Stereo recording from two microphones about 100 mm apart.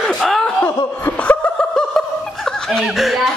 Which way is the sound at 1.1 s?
15° left (ahead or behind).